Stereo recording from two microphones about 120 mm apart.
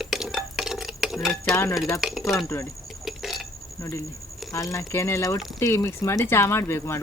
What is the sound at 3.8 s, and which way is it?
Speech, 25° left (ahead or behind).